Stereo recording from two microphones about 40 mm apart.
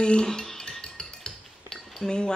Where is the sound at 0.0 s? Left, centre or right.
Centre.